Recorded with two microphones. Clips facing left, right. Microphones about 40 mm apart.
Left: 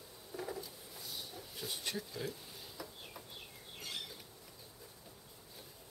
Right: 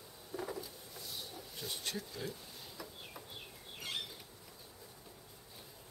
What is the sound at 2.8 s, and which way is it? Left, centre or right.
Chicken, centre.